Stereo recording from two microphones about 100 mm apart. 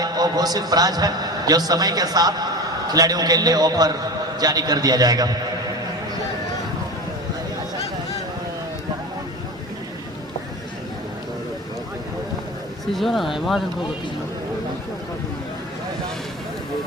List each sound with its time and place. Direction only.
0.0 s a man's voice: 40° right (ahead or behind)
12.9 s speech: centre (ahead or behind)